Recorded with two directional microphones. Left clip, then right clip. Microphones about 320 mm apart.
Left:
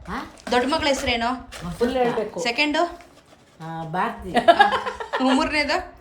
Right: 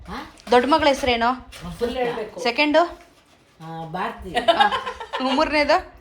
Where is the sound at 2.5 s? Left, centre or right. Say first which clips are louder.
Right 4 dB; centre.